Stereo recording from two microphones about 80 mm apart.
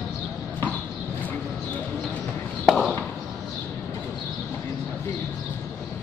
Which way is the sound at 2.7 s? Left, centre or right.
Centre.